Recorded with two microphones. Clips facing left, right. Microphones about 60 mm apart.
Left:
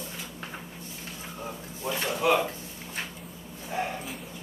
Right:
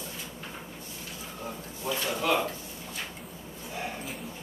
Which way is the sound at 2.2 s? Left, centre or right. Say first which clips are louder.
Left 4 dB; centre.